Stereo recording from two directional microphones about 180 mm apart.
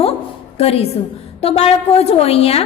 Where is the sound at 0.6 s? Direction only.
35° left (ahead or behind).